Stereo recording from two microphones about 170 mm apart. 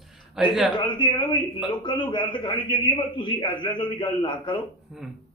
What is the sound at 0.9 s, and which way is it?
A man's voice, 30° left (ahead or behind).